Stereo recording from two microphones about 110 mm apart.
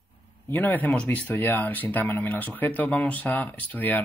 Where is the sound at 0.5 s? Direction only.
15° left (ahead or behind).